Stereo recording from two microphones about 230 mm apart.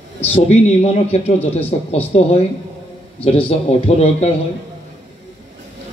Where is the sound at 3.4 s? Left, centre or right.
Left.